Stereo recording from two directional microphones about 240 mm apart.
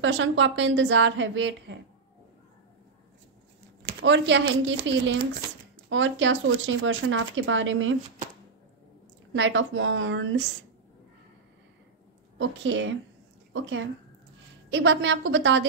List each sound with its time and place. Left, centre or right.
0.0 s speech: right
3.8 s speech: right
9.3 s speech: right
12.4 s a woman's voice: right